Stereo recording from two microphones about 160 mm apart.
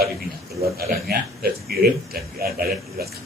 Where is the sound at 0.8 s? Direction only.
75° right (ahead or behind).